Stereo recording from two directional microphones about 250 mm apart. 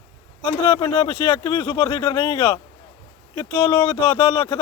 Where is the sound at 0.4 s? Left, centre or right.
Centre.